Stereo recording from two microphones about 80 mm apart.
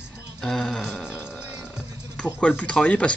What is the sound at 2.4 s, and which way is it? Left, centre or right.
Speech, centre.